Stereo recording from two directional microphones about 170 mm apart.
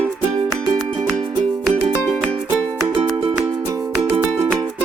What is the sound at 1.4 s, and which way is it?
Music, 5° left (ahead or behind).